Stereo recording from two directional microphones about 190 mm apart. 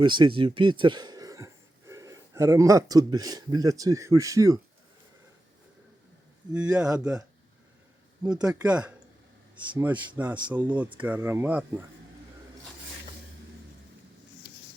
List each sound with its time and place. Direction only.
0.0 s speech: 25° right (ahead or behind)
6.5 s speech: 5° right (ahead or behind)
8.2 s speech: 5° right (ahead or behind)